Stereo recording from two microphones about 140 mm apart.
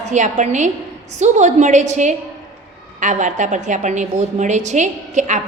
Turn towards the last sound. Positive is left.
turn(degrees=-60)  # may be behind; listen again after turning